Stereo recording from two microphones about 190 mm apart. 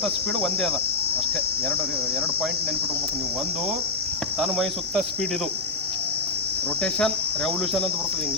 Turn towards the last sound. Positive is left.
turn(degrees=0)  # may be behind; listen again after turning